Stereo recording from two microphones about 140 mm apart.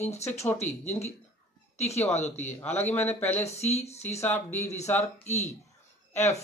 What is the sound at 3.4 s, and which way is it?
Speech, 50° left (ahead or behind).